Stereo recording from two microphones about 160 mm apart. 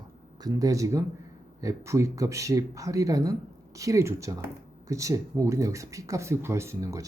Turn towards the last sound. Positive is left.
turn(degrees=-20)  # may be behind; listen again after turning